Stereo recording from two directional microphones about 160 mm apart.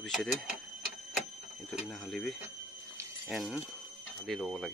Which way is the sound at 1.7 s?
Centre (ahead or behind).